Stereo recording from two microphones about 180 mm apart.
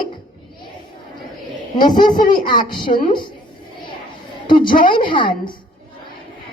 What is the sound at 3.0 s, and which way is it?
Speech, 25° left (ahead or behind).